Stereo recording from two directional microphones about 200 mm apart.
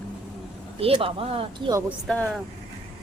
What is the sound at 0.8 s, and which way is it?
Speech, 30° right (ahead or behind).